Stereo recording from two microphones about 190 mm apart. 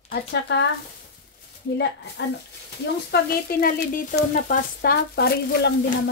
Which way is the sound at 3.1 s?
55° left (ahead or behind).